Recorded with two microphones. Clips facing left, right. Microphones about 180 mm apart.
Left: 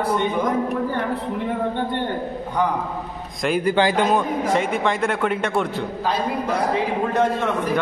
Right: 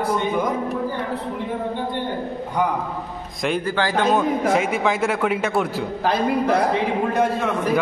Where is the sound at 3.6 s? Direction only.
15° left (ahead or behind).